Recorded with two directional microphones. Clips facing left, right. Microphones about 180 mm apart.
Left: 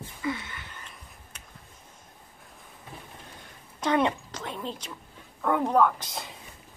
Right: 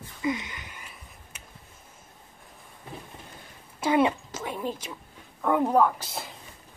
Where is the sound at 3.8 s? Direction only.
5° right (ahead or behind).